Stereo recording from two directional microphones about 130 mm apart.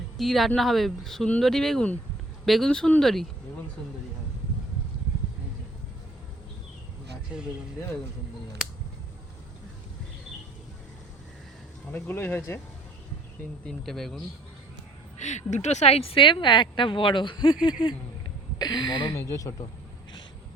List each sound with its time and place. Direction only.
0.2 s speech: centre (ahead or behind)
11.9 s speech: 15° left (ahead or behind)
13.7 s speech: 5° left (ahead or behind)
15.2 s speech: 65° left (ahead or behind); by 19.2 s 35° left (ahead or behind)
19.2 s speech: 20° left (ahead or behind)